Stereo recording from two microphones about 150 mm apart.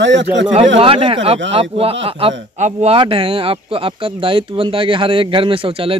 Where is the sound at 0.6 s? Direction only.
40° right (ahead or behind).